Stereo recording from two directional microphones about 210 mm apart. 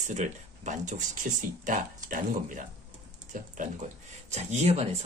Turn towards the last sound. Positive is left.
turn(degrees=-30)  # may be behind; listen again after turning